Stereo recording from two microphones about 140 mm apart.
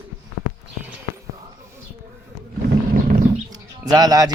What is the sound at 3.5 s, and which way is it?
Bird, 25° right (ahead or behind).